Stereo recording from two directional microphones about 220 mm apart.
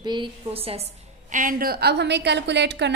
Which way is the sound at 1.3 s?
40° right (ahead or behind).